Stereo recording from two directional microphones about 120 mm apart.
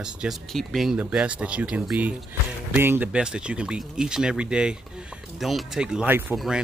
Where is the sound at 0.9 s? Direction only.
10° right (ahead or behind).